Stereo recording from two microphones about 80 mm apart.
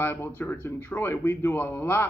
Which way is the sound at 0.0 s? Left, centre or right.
Left.